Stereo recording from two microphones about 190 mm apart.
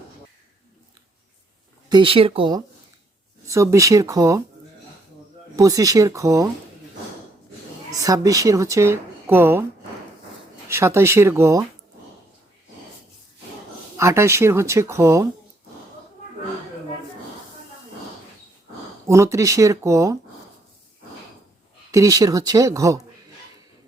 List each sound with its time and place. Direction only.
1.9 s speech: 25° right (ahead or behind)
5.5 s speech: 20° right (ahead or behind)
7.9 s a woman's voice: 20° right (ahead or behind)
10.7 s speech: 15° right (ahead or behind)
13.9 s speech: 15° right (ahead or behind)
19.0 s speech: 15° right (ahead or behind)
21.9 s speech: 20° right (ahead or behind)